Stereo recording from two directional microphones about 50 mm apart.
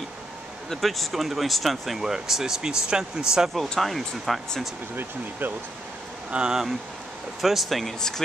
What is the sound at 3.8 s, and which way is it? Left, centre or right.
Speech, centre.